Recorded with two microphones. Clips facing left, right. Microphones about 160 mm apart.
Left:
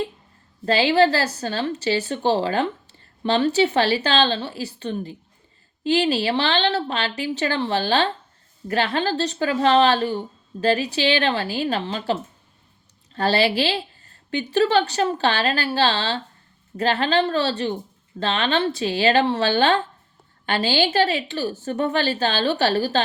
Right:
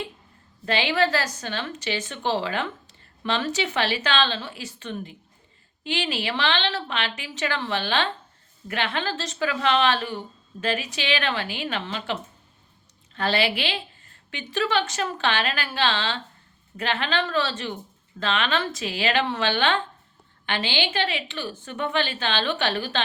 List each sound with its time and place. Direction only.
0.6 s a woman's voice: 35° left (ahead or behind)
13.1 s a woman's voice: 35° left (ahead or behind)